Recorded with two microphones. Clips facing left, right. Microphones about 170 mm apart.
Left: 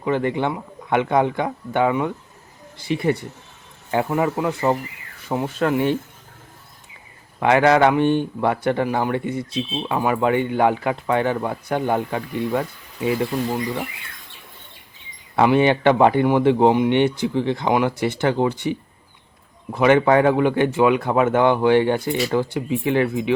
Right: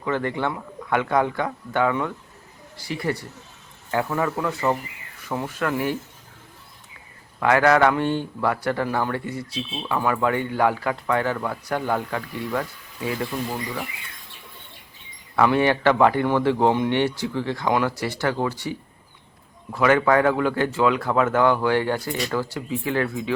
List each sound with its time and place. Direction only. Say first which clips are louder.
0.0 s speech: left 4 dB; 20° left (ahead or behind)
7.3 s speech: left 2 dB; 20° left (ahead or behind)
15.4 s speech: left 3 dB; 20° left (ahead or behind)